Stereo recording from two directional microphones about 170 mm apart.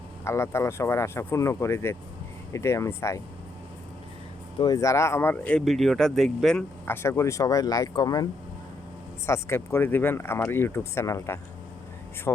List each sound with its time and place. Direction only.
0.3 s speech: 15° left (ahead or behind)
4.5 s speech: 25° left (ahead or behind)